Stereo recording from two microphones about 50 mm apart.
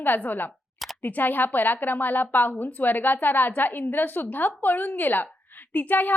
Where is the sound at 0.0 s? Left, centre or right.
Left.